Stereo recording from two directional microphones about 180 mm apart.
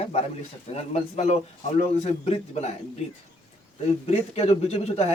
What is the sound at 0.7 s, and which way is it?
Speech, 35° left (ahead or behind).